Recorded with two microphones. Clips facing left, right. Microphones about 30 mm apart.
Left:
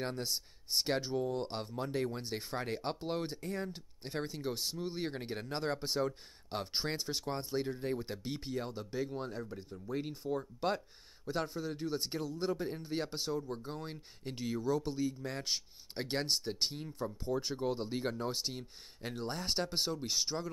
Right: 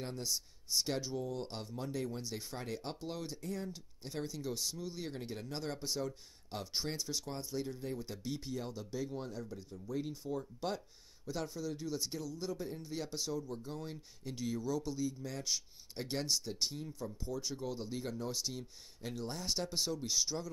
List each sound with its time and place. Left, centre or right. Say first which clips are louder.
0.0 s speech: left 3 dB; left